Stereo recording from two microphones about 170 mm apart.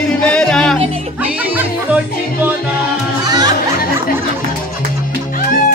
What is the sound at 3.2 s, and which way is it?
Music, 25° right (ahead or behind).